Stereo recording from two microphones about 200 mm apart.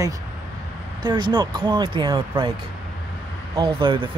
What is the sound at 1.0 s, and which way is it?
Speech, 20° right (ahead or behind).